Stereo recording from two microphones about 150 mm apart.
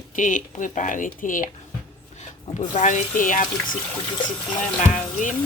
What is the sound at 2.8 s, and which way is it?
Speech, 55° left (ahead or behind).